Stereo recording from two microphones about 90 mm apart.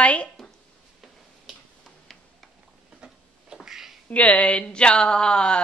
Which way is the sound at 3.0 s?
5° right (ahead or behind).